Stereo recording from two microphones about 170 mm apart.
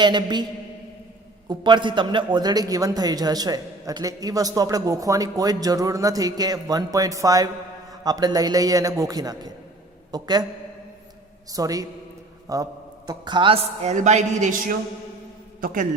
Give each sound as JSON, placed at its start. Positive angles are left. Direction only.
{"t": 0.0, "sound": "a man's voice", "side_deg": -25}
{"t": 1.5, "sound": "a man's voice", "side_deg": -25}
{"t": 11.5, "sound": "a man's voice", "side_deg": -20}